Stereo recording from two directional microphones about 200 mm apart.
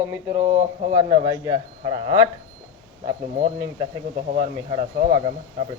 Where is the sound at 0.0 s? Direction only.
10° right (ahead or behind); by 3.5 s 35° right (ahead or behind).